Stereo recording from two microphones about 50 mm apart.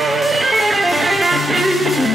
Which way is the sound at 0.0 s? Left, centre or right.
Centre.